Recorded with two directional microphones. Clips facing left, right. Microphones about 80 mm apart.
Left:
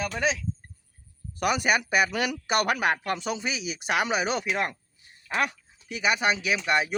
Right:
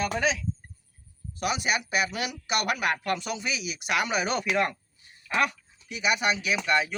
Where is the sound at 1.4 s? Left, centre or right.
Left.